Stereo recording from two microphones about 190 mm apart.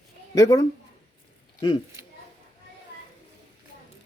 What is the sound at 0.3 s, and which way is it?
Speech, 20° left (ahead or behind).